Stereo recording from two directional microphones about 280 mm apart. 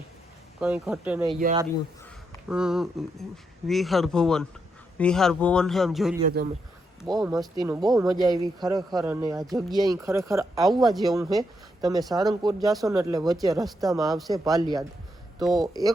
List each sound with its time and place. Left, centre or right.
0.6 s a man's voice: centre
2.5 s a man's voice: centre
6.2 s speech: right
7.0 s a man's voice: centre
7.6 s speech: centre
10.7 s a man's voice: centre
11.2 s speech: centre
15.4 s a man's voice: centre
15.6 s speech: centre